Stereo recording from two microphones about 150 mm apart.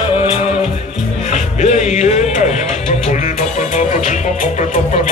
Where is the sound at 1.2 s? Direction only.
50° left (ahead or behind).